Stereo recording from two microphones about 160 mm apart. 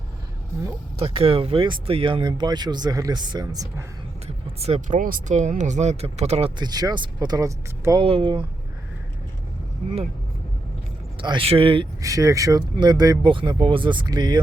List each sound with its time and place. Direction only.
0.9 s speech: 35° right (ahead or behind)
4.6 s speech: 40° right (ahead or behind)
4.9 s speech: 55° right (ahead or behind)
6.6 s speech: 25° right (ahead or behind)
8.0 s speech: 35° right (ahead or behind)
11.2 s speech: 30° right (ahead or behind)
12.0 s speech: 20° right (ahead or behind)